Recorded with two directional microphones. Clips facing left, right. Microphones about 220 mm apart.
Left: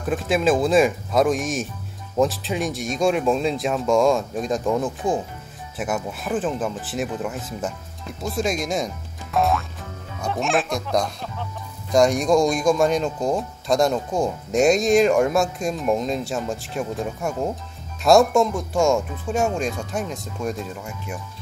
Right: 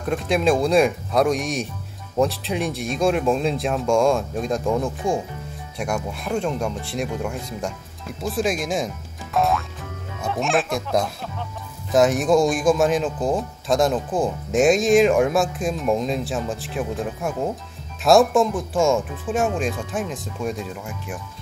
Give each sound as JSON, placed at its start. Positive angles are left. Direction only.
{"t": 0.0, "sound": "a man's voice", "side_deg": 0}